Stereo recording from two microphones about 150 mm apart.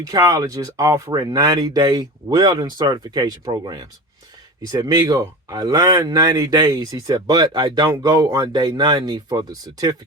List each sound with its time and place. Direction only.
0.0 s speech: 25° right (ahead or behind)